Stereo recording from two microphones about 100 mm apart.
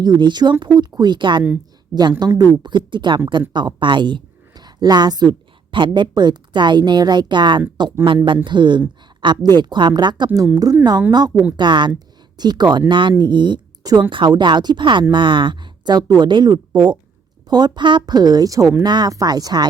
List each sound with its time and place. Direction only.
0.0 s a woman's voice: 45° right (ahead or behind)
10.3 s speech: 35° right (ahead or behind)
11.5 s speech: 50° right (ahead or behind)